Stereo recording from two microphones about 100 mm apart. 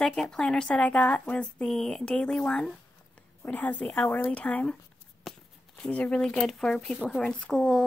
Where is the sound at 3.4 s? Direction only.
15° left (ahead or behind).